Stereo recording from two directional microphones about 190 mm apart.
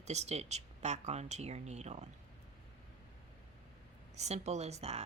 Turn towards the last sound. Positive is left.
turn(degrees=-35)  # may be behind; listen again after turning